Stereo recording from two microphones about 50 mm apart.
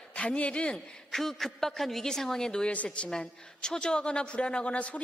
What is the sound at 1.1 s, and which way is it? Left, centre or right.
A woman's voice, centre.